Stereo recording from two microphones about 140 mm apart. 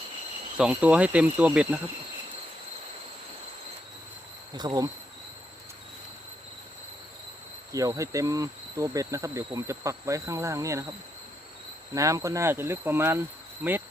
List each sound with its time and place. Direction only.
0.5 s speech: 5° right (ahead or behind)
4.5 s speech: 30° right (ahead or behind)
7.7 s speech: 25° right (ahead or behind)
11.9 s speech: 25° right (ahead or behind)